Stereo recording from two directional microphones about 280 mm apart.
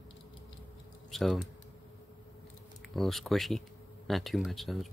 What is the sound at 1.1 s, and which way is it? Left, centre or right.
Speech, centre.